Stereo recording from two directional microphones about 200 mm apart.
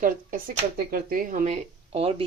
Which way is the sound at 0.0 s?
45° right (ahead or behind).